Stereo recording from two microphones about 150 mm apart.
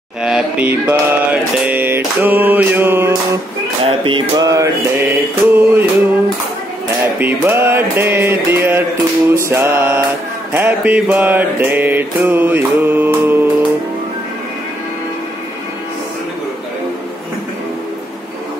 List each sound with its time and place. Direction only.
0.2 s mantra: 5° right (ahead or behind)
3.8 s speech: 35° right (ahead or behind)
4.5 s mantra: 20° right (ahead or behind)
7.2 s mantra: 15° right (ahead or behind)